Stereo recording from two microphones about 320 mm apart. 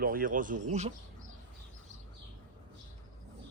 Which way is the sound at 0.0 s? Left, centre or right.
Right.